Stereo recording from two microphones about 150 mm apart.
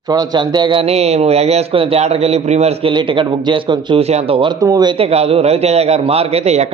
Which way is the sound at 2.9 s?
30° right (ahead or behind).